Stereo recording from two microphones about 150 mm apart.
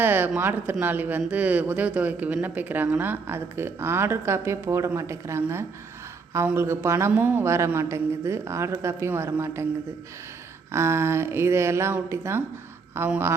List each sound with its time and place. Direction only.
0.0 s speech: 15° right (ahead or behind)
10.7 s speech: 20° right (ahead or behind)